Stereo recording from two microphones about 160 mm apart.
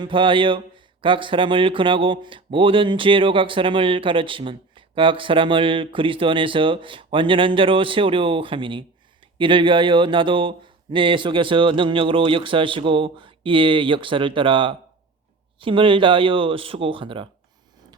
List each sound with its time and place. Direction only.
0.0 s speech: 30° right (ahead or behind)